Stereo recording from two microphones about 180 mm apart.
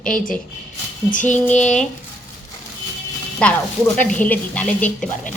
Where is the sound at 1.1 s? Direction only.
45° left (ahead or behind).